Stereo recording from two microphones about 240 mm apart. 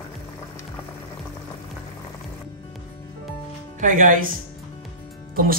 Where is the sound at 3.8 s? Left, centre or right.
Right.